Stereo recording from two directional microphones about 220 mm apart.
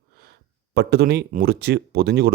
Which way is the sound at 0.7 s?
50° right (ahead or behind).